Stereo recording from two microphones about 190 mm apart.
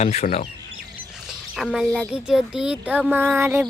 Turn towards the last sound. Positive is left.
turn(degrees=-10)  # may be behind; listen again after turning